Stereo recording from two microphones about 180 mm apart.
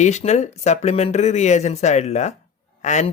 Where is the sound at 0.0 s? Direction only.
40° left (ahead or behind).